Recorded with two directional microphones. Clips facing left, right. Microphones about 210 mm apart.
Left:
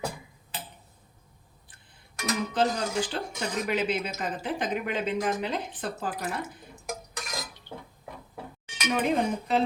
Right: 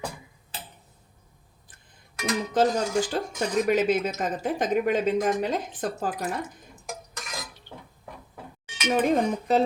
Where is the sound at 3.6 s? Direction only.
40° right (ahead or behind).